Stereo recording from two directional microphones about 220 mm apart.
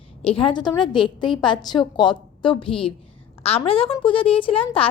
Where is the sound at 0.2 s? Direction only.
25° left (ahead or behind).